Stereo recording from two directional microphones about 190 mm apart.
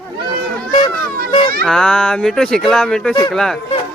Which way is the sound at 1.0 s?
50° right (ahead or behind).